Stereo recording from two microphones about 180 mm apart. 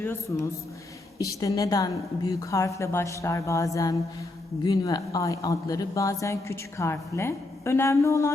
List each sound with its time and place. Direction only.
0.0 s a woman's voice: 15° left (ahead or behind)